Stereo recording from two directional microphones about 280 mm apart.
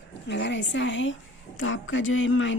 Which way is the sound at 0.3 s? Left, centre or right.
Left.